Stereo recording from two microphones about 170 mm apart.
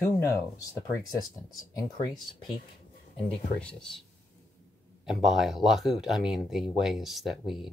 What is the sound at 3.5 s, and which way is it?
Speech, 5° left (ahead or behind).